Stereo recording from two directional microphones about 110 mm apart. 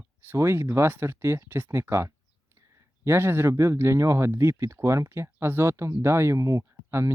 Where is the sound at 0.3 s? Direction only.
20° right (ahead or behind).